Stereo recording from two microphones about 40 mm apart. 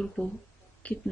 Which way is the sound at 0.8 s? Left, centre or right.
Left.